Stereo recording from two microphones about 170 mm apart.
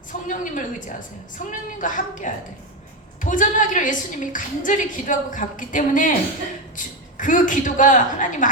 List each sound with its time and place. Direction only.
0.1 s a woman's voice: 50° left (ahead or behind)